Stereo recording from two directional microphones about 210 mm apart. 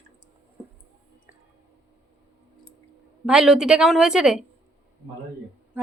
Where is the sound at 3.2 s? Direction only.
5° right (ahead or behind).